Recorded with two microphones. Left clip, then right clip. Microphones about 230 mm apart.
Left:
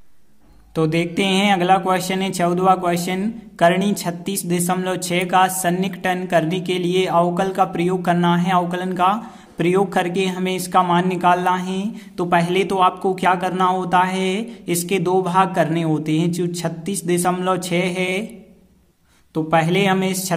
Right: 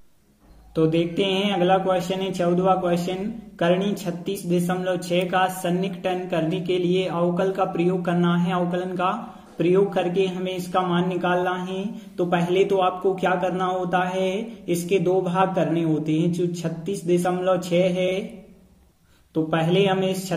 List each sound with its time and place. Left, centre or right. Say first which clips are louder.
0.7 s speech: left 1 dB; left
19.3 s speech: left 4 dB; left